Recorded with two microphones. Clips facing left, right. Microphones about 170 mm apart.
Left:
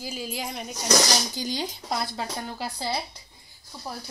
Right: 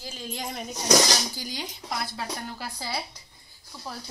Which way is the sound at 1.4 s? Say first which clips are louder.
Left 6 dB; 30° left (ahead or behind).